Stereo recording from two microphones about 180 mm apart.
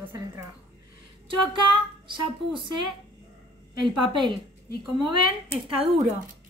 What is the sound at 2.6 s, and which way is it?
A woman's voice, 25° right (ahead or behind).